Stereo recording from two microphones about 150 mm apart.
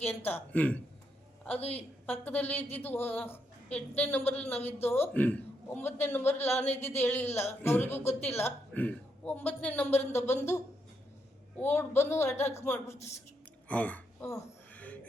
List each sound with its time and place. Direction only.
0.3 s speech: 10° left (ahead or behind)
1.5 s a woman's voice: 45° left (ahead or behind)
2.0 s speech: 10° left (ahead or behind)
13.7 s a sound: 10° left (ahead or behind)